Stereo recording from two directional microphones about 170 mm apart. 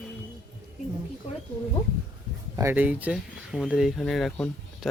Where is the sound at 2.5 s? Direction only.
15° right (ahead or behind).